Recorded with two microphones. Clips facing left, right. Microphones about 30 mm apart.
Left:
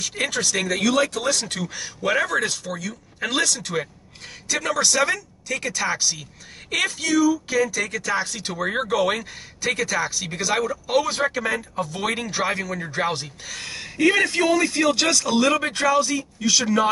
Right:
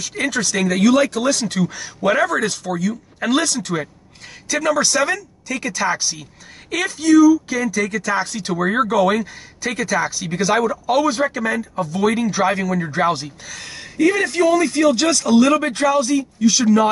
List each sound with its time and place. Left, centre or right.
0.0 s speech: centre
0.7 s speech: centre
6.7 s speech: centre
10.9 s speech: centre
12.4 s speech: centre
13.5 s speech: centre